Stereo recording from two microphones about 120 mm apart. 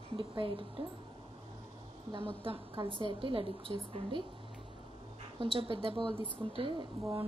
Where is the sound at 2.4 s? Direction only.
45° right (ahead or behind).